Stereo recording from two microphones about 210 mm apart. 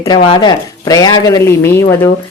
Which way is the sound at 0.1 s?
20° left (ahead or behind).